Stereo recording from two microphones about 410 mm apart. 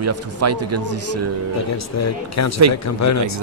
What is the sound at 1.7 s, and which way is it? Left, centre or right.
A man's voice, left.